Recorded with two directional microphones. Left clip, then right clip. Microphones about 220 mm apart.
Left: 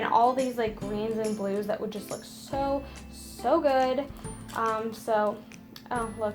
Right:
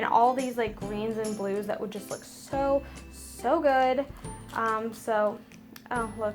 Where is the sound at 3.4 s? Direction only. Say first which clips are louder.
Even; 30° right (ahead or behind).